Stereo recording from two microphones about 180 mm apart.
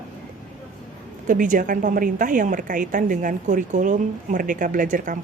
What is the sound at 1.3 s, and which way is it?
A woman's voice, 50° right (ahead or behind).